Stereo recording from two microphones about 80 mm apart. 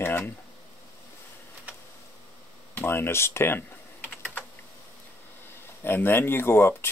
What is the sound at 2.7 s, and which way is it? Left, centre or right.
Speech, left.